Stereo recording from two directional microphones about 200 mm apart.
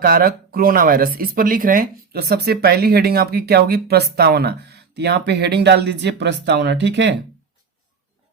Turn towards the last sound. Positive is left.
turn(degrees=-60)  # may be behind; listen again after turning